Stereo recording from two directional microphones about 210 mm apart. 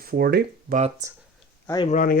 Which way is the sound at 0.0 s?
45° right (ahead or behind).